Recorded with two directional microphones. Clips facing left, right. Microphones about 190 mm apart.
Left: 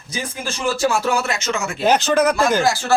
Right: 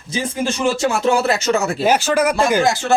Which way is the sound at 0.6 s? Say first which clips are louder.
Right 1 dB; 25° right (ahead or behind).